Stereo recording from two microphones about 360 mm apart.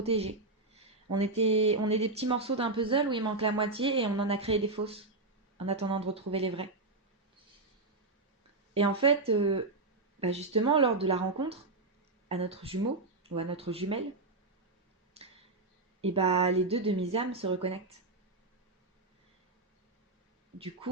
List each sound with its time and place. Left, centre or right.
0.0 s speech: centre
9.0 s speech: centre
15.2 s a sound: centre
16.0 s speech: centre